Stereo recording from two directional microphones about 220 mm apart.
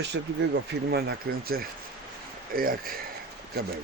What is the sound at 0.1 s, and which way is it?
Speech, 60° right (ahead or behind).